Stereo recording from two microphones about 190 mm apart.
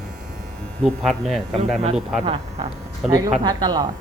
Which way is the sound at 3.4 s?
20° right (ahead or behind).